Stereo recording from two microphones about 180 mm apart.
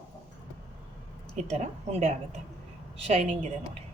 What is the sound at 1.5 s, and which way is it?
Speech, 35° right (ahead or behind).